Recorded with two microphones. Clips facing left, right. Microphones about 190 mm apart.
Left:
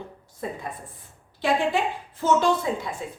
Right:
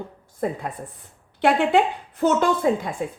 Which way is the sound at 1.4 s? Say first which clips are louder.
Right 5 dB; 65° right (ahead or behind).